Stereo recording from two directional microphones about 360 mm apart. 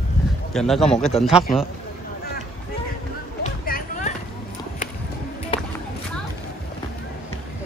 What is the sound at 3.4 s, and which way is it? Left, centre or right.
Music, left.